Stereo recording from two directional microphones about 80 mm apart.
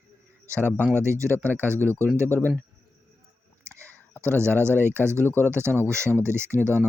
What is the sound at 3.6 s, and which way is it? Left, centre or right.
Clicking, right.